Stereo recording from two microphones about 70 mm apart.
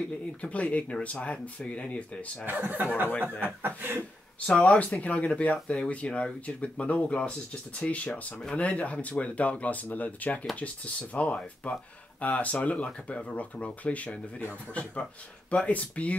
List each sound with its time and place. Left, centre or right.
0.4 s speech: centre
2.4 s speech: right
4.5 s speech: centre